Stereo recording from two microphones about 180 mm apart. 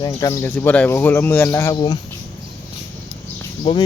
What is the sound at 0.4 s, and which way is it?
Speech, 10° left (ahead or behind).